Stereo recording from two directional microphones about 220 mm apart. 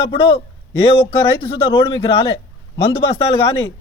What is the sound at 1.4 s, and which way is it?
A man's voice, 25° left (ahead or behind).